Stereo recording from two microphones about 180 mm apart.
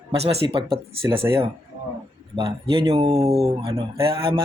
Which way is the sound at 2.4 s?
20° right (ahead or behind).